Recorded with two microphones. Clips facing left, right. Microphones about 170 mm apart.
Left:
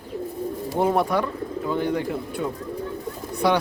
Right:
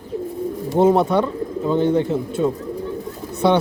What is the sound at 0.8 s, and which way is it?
Speech, 20° right (ahead or behind).